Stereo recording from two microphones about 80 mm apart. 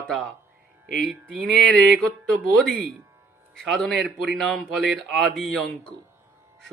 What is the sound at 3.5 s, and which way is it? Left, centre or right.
A man's voice, centre.